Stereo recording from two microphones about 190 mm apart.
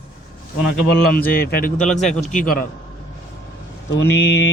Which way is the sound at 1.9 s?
5° left (ahead or behind).